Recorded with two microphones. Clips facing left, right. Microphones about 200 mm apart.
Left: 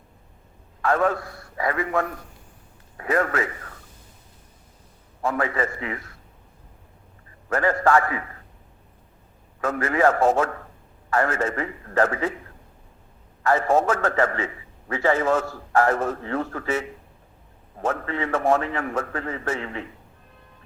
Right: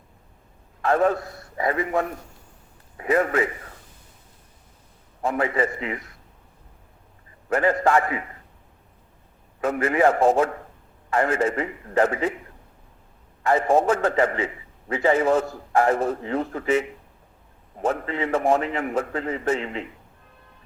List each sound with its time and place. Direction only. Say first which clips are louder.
0.8 s a man's voice: right 2 dB; 25° right (ahead or behind)
5.2 s a man's voice: right 2 dB; 20° right (ahead or behind)
7.5 s a man's voice: even; 20° right (ahead or behind)
9.6 s a man's voice: right 1 dB; 15° right (ahead or behind)
13.4 s a man's voice: right 1 dB; 15° right (ahead or behind)